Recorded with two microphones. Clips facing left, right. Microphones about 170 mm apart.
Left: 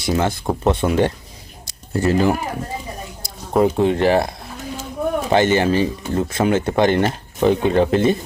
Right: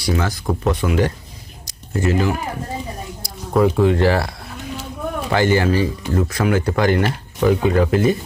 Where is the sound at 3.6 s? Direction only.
20° left (ahead or behind).